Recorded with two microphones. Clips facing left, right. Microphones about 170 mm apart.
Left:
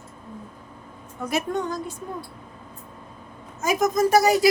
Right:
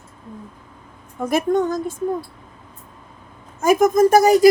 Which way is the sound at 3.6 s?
50° right (ahead or behind).